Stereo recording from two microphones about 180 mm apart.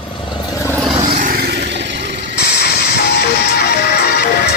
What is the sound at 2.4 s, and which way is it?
Music, 65° left (ahead or behind).